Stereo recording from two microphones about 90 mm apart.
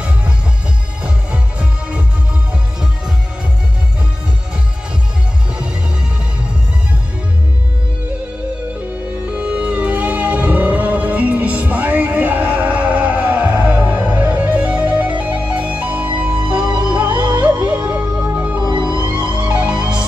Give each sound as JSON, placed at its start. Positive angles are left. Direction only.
{"t": 1.0, "sound": "music", "side_deg": -10}
{"t": 9.3, "sound": "music", "side_deg": -15}
{"t": 17.1, "sound": "music", "side_deg": -55}
{"t": 17.8, "sound": "music", "side_deg": -20}
{"t": 18.6, "sound": "music", "side_deg": -55}
{"t": 19.4, "sound": "music", "side_deg": -15}